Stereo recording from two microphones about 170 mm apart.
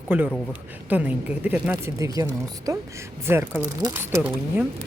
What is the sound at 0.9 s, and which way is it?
Speech, 10° right (ahead or behind).